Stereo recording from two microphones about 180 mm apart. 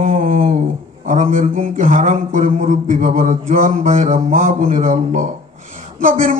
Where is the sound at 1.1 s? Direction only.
45° right (ahead or behind).